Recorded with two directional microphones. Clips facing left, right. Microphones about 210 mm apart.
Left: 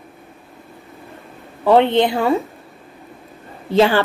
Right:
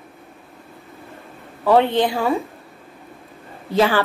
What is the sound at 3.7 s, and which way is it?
Speech, 25° left (ahead or behind).